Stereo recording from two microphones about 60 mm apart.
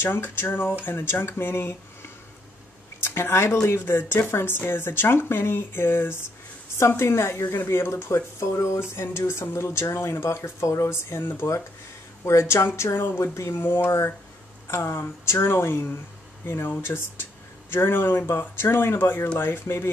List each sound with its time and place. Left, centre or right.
0.0 s speech: left
3.0 s speech: left
8.9 s speech: left
12.3 s speech: left
13.6 s speech: left